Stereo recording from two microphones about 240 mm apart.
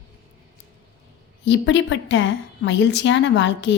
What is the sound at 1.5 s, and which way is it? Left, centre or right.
A woman's voice, left.